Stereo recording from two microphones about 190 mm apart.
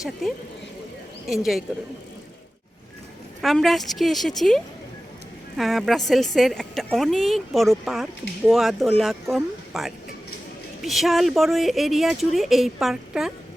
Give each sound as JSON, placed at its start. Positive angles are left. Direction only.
{"t": 0.0, "sound": "speech", "side_deg": 0}
{"t": 1.7, "sound": "speech", "side_deg": -5}
{"t": 3.4, "sound": "speech", "side_deg": 0}